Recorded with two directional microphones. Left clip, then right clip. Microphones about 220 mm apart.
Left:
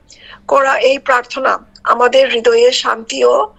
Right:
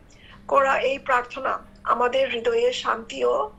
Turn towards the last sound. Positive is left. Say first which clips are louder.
# left 11 dB
turn(degrees=45)  # may be behind; listen again after turning